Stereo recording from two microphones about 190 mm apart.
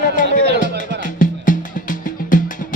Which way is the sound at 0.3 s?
65° right (ahead or behind).